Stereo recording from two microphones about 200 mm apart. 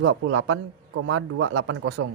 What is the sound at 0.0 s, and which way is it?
A man's voice, 85° right.